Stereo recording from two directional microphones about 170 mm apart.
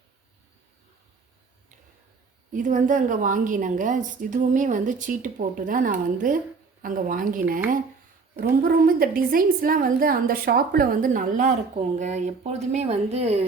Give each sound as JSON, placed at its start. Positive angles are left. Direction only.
{"t": 2.5, "sound": "a woman's voice", "side_deg": -50}